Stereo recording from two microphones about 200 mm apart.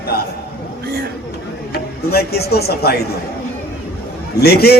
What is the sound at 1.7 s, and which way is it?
Speech, 50° left (ahead or behind).